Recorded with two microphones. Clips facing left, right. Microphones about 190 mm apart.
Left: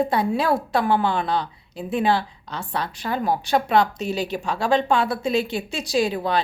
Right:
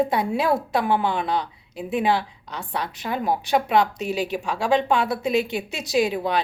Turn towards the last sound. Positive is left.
turn(degrees=-15)  # may be behind; listen again after turning